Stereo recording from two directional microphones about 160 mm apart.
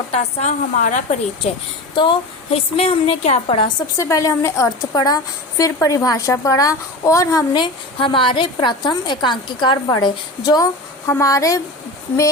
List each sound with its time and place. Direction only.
0.1 s a woman's voice: 40° left (ahead or behind)
2.0 s a woman's voice: 35° left (ahead or behind)
3.9 s a woman's voice: 20° left (ahead or behind)